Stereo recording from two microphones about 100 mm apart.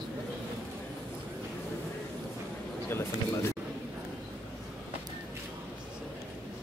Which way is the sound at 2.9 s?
25° left (ahead or behind).